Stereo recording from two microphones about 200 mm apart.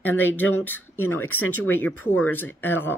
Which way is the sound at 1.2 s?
90° left.